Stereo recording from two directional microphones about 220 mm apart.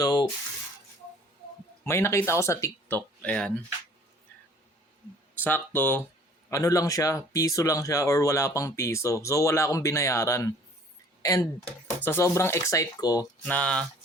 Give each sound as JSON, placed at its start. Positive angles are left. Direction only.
{"t": 0.0, "sound": "a sound", "side_deg": 15}
{"t": 1.8, "sound": "speech", "side_deg": 10}
{"t": 5.4, "sound": "speech", "side_deg": 10}
{"t": 13.4, "sound": "speech", "side_deg": 5}